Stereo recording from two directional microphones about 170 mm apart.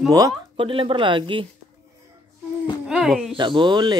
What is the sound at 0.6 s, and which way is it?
Speech, 30° right (ahead or behind).